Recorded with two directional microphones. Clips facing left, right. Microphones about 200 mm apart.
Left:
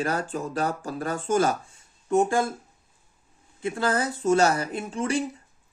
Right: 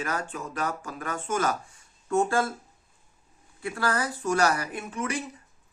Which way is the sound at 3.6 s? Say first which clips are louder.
Left 3 dB; 20° left (ahead or behind).